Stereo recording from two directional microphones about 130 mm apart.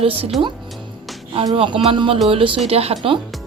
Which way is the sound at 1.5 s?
40° right (ahead or behind).